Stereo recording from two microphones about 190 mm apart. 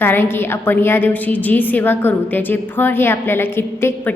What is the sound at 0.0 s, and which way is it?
A woman's voice, 10° left (ahead or behind).